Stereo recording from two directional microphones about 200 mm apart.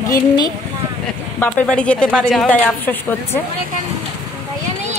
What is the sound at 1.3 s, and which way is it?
A woman's voice, 10° left (ahead or behind).